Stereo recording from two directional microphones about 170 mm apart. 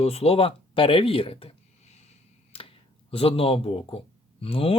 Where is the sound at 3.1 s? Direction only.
35° left (ahead or behind).